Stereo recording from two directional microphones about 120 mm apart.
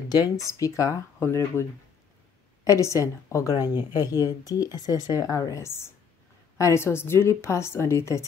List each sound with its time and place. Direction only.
0.1 s a woman's voice: 30° left (ahead or behind)
2.9 s a woman's voice: 25° left (ahead or behind)